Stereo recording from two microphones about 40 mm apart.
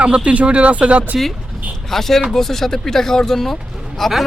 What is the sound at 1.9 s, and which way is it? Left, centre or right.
Speech, centre.